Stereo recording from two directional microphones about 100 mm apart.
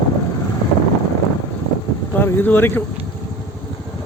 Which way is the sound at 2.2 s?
20° left (ahead or behind).